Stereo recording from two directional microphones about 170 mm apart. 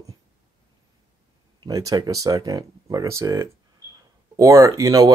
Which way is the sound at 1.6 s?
20° right (ahead or behind).